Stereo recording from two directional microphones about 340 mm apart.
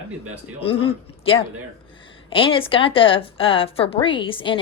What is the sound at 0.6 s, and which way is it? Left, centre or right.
A woman's voice, centre.